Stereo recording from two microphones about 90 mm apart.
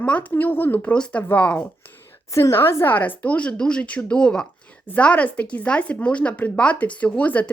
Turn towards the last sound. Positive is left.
turn(degrees=15)  # may be behind; listen again after turning